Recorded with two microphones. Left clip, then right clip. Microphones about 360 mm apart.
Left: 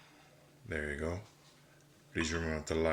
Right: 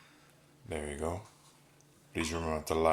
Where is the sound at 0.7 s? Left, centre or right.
Right.